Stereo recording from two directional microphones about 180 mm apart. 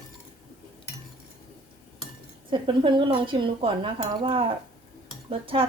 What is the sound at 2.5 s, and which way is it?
Speech, 30° right (ahead or behind).